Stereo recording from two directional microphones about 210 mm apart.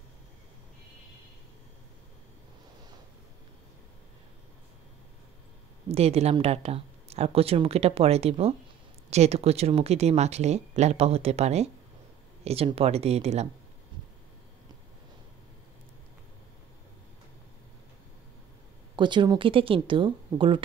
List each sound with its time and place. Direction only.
5.9 s speech: 30° right (ahead or behind)
18.9 s speech: 20° right (ahead or behind)